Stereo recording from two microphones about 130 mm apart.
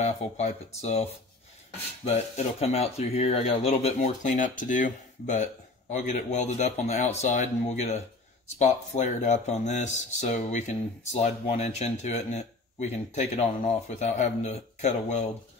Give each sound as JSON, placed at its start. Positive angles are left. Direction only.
{"t": 0.0, "sound": "speech", "side_deg": 60}